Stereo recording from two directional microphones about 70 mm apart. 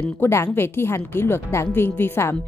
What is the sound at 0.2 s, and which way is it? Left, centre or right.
A woman's voice, left.